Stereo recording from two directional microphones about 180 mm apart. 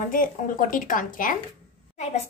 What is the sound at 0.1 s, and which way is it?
Speech, 50° left (ahead or behind).